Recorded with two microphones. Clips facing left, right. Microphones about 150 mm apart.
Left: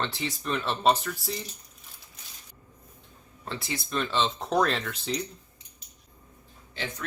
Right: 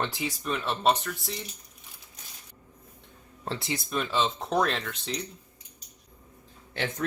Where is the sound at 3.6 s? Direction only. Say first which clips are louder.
Even; 20° right (ahead or behind).